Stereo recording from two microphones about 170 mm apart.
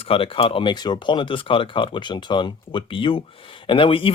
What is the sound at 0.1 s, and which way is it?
Speech, 30° left (ahead or behind).